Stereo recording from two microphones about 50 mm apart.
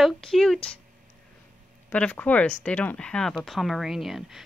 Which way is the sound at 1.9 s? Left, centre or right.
Left.